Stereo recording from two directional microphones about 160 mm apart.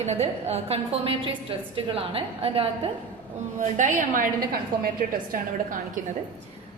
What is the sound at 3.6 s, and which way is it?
A woman's voice, 50° right (ahead or behind).